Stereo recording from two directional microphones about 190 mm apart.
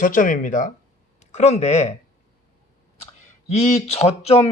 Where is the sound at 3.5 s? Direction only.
35° left (ahead or behind).